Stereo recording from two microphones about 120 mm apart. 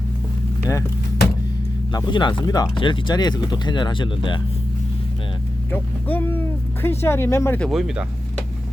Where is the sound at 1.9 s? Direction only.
40° left (ahead or behind).